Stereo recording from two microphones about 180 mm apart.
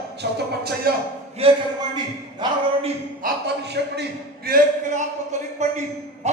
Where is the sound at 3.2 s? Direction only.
65° right (ahead or behind).